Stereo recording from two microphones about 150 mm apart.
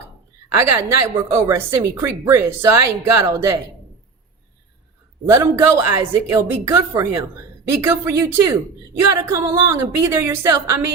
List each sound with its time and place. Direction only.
0.5 s a woman's voice: 20° right (ahead or behind)
5.3 s a woman's voice: 20° right (ahead or behind)